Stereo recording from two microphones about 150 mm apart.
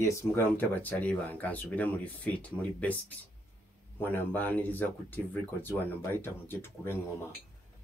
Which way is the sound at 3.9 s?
15° left (ahead or behind).